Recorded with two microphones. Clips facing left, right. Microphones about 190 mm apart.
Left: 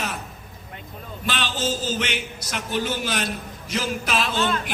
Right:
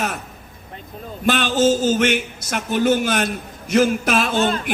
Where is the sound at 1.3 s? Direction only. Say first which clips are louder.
Right 10 dB; 50° right (ahead or behind).